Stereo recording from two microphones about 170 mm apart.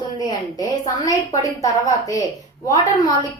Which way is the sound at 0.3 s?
20° left (ahead or behind).